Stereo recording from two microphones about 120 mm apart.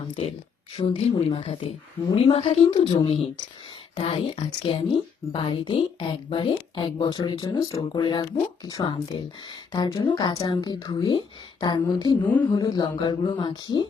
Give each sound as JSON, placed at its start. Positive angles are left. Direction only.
{"t": 0.8, "sound": "a woman's voice", "side_deg": 55}
{"t": 2.6, "sound": "a woman's voice", "side_deg": 40}
{"t": 12.2, "sound": "speech", "side_deg": 15}
{"t": 12.5, "sound": "a woman's voice", "side_deg": 35}